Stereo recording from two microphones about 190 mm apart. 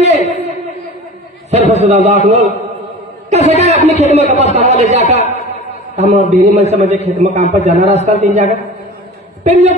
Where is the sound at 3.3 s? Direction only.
35° right (ahead or behind).